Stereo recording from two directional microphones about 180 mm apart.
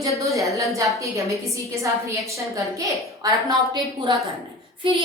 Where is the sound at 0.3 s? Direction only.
15° right (ahead or behind).